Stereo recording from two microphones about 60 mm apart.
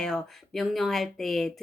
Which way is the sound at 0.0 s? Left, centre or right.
Centre.